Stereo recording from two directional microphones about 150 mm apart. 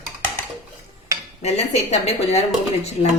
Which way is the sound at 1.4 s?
45° left (ahead or behind).